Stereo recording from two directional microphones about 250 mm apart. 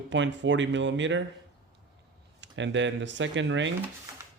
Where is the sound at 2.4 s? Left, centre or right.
Right.